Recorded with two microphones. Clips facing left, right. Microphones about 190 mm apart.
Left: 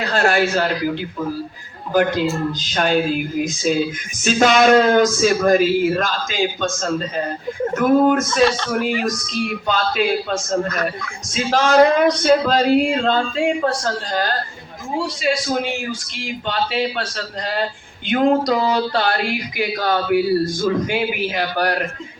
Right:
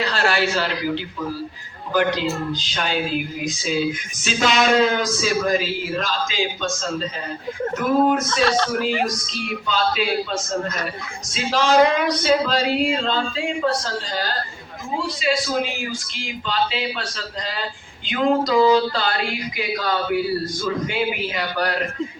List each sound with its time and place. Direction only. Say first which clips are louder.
0.0 s speech: left 4 dB; 50° left (ahead or behind)
9.6 s speech: left 1 dB; 50° left (ahead or behind)
11.3 s speech: left 3 dB; 50° left (ahead or behind)
16.5 s a sound: left 2 dB; 55° left (ahead or behind)